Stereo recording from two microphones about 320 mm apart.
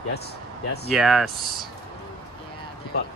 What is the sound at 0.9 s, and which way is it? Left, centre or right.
Speech, centre.